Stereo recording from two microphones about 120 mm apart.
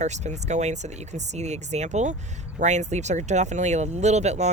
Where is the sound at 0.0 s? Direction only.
75° right (ahead or behind).